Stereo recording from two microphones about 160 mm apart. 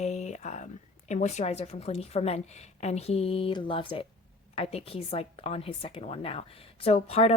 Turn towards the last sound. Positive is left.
turn(degrees=40)  # may be behind; listen again after turning